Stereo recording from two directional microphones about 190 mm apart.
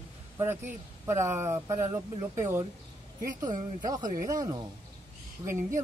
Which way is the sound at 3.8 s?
20° right (ahead or behind).